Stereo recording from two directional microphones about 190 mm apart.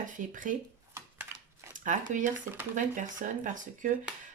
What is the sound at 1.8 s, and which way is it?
Speech, 40° right (ahead or behind).